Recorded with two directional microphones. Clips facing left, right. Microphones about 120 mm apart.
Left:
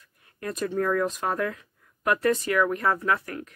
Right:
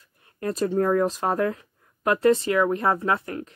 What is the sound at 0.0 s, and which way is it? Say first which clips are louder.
Speech: right 5 dB; 30° right (ahead or behind).